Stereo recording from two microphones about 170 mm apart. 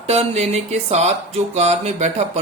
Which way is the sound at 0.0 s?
40° right (ahead or behind).